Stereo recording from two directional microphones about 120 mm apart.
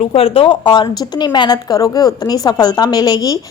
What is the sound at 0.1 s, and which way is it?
A woman's voice, 50° left (ahead or behind).